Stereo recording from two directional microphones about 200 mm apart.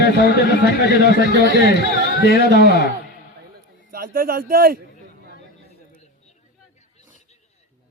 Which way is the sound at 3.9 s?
45° right (ahead or behind).